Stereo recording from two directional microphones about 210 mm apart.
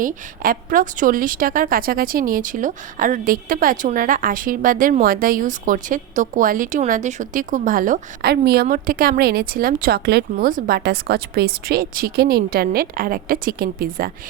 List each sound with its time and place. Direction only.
0.0 s a woman's voice: 40° right (ahead or behind)